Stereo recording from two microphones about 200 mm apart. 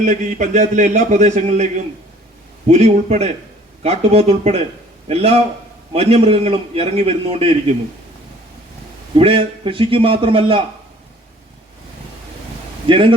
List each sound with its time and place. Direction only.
0.0 s a man's voice: 40° right (ahead or behind)
9.1 s a man's voice: 25° right (ahead or behind)
12.9 s a man's voice: 25° right (ahead or behind)